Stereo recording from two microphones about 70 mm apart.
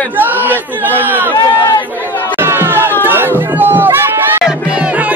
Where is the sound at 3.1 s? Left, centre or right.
Right.